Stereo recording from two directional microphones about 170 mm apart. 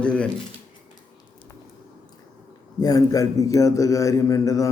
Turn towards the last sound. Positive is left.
turn(degrees=20)  # may be behind; listen again after turning